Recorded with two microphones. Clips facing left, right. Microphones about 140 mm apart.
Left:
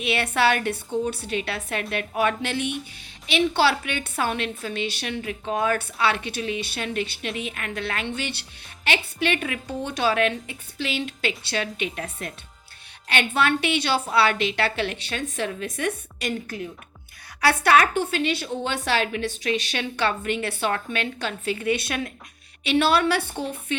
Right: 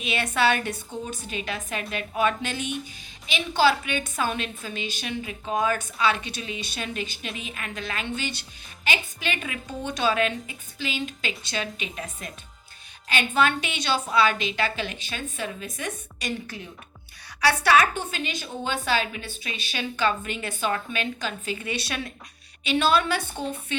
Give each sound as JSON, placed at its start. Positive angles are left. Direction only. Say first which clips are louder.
{"t": 0.0, "sound": "a woman's voice", "louder": "left 2 dB", "side_deg": 65}